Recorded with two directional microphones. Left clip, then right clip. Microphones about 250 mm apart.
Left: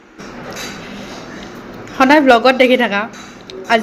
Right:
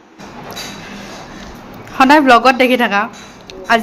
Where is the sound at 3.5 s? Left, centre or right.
Centre.